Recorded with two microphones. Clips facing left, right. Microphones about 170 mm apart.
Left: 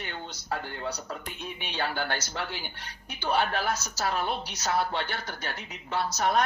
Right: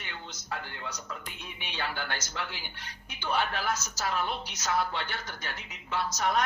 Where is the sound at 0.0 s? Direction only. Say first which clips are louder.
Left 5 dB; 35° left (ahead or behind).